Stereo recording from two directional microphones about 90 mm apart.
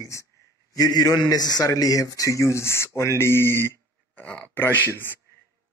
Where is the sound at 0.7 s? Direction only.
45° left (ahead or behind); by 5.2 s 25° left (ahead or behind).